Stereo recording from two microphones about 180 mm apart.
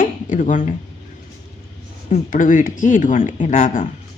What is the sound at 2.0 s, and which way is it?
Speech, 45° left (ahead or behind).